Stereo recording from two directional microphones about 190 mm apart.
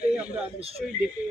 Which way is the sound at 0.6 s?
30° right (ahead or behind).